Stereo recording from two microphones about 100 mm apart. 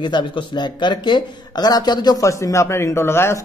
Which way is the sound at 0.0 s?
50° left (ahead or behind).